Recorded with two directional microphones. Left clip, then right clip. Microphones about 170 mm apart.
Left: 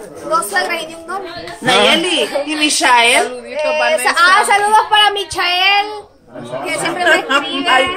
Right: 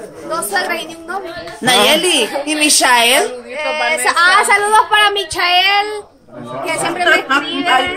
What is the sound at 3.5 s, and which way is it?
A woman's voice, 15° right (ahead or behind).